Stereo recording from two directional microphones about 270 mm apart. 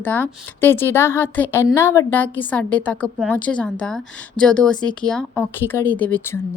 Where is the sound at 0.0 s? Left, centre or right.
Centre.